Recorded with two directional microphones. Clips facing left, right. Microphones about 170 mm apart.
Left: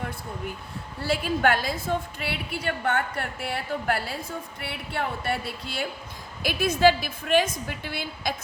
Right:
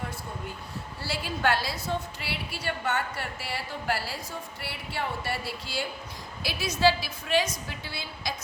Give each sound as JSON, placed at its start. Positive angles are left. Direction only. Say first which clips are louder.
{"t": 1.0, "sound": "a woman's voice", "louder": "left 5 dB", "side_deg": 55}